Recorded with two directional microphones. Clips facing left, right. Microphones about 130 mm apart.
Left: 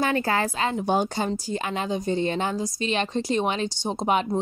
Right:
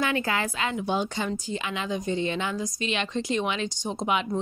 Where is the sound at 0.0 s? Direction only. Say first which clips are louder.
Left 3 dB; 40° left (ahead or behind).